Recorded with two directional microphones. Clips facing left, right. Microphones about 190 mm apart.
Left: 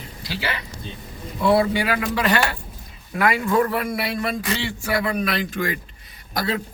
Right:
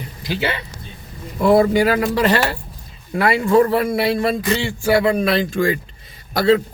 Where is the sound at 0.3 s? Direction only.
25° right (ahead or behind).